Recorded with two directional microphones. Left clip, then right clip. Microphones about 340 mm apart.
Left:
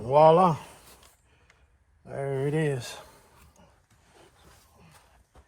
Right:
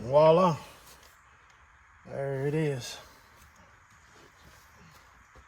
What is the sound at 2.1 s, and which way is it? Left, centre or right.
Speech, left.